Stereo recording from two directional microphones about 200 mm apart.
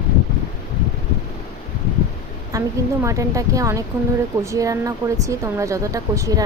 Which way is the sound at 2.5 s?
15° right (ahead or behind).